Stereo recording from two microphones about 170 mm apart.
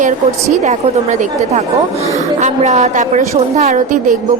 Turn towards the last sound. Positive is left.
turn(degrees=-45)  # may be behind; listen again after turning